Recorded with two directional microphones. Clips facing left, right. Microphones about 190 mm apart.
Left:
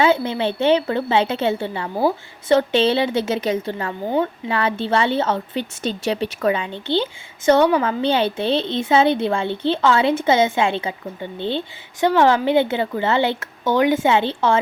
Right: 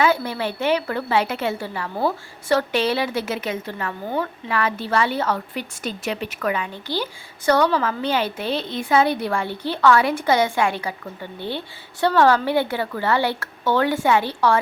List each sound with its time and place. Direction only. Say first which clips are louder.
0.0 s a woman's voice: left 3 dB; 25° left (ahead or behind)